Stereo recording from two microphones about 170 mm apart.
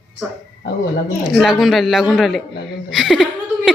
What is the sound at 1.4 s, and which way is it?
A woman's voice, centre (ahead or behind).